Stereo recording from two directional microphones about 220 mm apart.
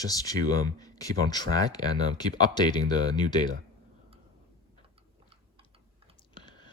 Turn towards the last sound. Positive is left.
turn(degrees=20)  # may be behind; listen again after turning